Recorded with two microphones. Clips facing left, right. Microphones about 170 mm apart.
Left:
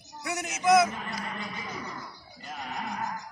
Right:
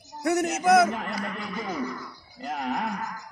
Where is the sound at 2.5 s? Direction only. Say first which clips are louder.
Right 8 dB; 70° right (ahead or behind).